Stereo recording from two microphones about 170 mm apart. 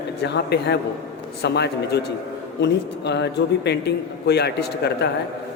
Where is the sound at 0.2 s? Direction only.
80° left.